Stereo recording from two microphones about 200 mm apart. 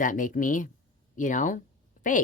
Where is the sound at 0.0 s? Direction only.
40° left (ahead or behind).